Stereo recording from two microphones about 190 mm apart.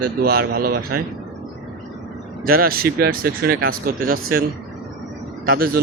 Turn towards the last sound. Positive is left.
turn(degrees=-55)  # may be behind; listen again after turning